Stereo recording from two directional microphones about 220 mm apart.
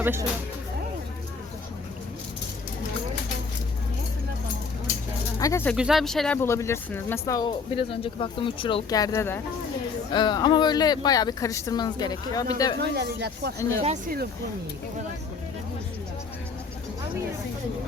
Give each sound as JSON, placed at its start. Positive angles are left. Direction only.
{"t": 0.0, "sound": "speech", "side_deg": -10}
{"t": 5.4, "sound": "speech", "side_deg": 10}
{"t": 5.7, "sound": "speech", "side_deg": 0}
{"t": 12.8, "sound": "speech", "side_deg": -50}
{"t": 13.6, "sound": "speech", "side_deg": 15}
{"t": 13.8, "sound": "speech", "side_deg": -35}